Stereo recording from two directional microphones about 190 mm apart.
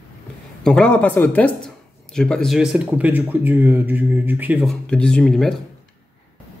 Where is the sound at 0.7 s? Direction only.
5° left (ahead or behind).